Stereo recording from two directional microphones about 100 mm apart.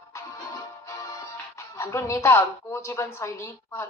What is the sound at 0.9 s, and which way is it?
Music, 35° left (ahead or behind).